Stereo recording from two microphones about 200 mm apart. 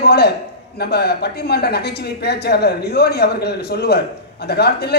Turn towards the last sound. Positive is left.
turn(degrees=55)  # may be behind; listen again after turning